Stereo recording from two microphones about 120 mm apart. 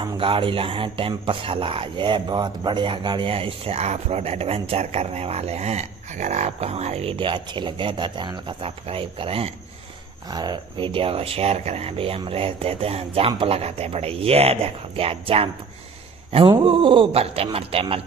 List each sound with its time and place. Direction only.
0.0 s speech: 45° right (ahead or behind)
10.3 s speech: 35° right (ahead or behind); by 18.0 s 50° right (ahead or behind)